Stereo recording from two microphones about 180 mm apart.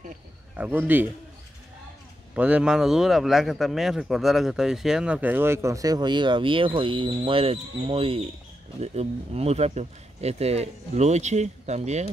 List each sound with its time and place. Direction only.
0.6 s a man's voice: 10° right (ahead or behind)
2.3 s a man's voice: 5° right (ahead or behind); by 12.1 s 40° right (ahead or behind)